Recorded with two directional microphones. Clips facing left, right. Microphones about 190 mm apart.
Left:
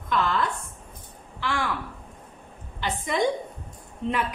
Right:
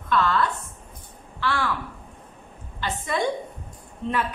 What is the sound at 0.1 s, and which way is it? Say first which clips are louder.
Speech: right 3 dB; 15° left (ahead or behind).